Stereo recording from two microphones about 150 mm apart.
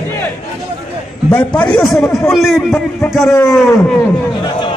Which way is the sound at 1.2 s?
5° left (ahead or behind).